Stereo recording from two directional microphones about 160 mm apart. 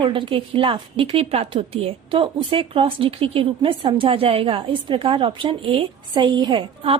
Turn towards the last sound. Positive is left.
turn(degrees=-35)  # may be behind; listen again after turning